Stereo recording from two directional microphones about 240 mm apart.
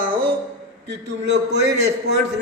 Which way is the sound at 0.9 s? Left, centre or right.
Right.